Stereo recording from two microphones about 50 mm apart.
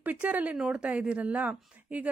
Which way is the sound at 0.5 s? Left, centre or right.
Centre.